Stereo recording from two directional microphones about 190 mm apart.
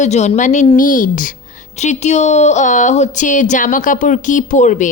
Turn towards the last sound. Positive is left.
turn(degrees=40)  # may be behind; listen again after turning